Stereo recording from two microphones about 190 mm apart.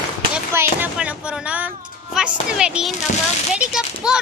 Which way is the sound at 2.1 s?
5° right (ahead or behind).